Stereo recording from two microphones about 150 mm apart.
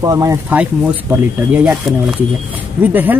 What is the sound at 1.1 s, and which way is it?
Speech, 10° right (ahead or behind).